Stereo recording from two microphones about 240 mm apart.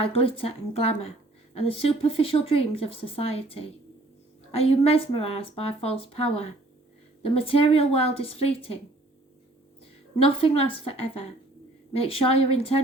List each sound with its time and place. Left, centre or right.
0.0 s a woman's voice: left
10.2 s a woman's voice: left